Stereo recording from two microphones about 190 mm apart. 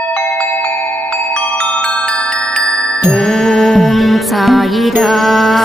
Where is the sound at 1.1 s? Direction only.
5° left (ahead or behind).